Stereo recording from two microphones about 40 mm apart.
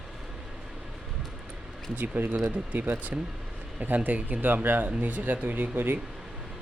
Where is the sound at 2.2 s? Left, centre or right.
Right.